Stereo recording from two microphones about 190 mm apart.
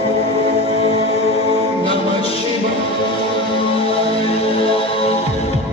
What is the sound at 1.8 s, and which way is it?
Music, 30° left (ahead or behind).